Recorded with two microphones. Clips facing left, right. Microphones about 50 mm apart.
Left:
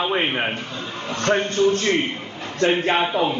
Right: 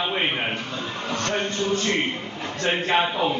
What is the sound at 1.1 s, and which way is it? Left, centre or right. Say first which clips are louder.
Speech: left 6 dB; left.